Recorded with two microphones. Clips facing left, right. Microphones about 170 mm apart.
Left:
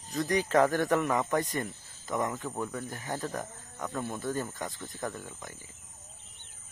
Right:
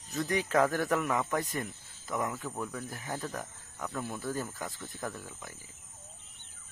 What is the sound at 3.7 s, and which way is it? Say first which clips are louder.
Speech: left 2 dB; 10° left (ahead or behind).